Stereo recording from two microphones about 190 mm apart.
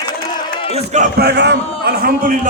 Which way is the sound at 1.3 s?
60° right (ahead or behind).